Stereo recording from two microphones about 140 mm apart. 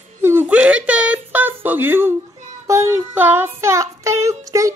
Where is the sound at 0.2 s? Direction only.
15° right (ahead or behind).